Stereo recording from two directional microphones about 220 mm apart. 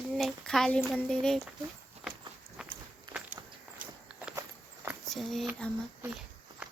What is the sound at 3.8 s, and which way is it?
Walk, 40° right (ahead or behind).